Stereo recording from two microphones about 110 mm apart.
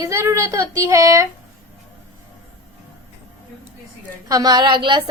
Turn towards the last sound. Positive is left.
turn(degrees=-45)  # may be behind; listen again after turning